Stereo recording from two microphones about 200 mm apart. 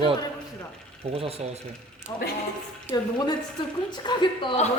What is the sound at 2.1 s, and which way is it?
A woman's voice, 15° left (ahead or behind).